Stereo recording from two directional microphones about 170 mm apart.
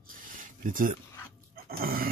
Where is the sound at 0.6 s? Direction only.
55° right (ahead or behind).